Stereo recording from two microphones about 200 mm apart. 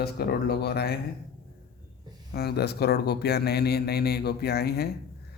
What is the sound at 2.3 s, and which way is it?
A man's voice, 55° left (ahead or behind).